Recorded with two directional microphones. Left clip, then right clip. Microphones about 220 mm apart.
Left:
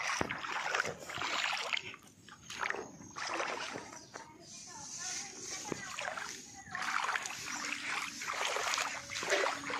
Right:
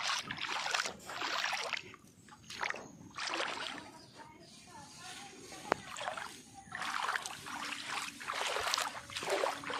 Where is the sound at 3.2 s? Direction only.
10° left (ahead or behind).